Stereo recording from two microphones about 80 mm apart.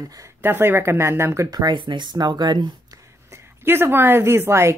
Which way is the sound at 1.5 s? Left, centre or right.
Right.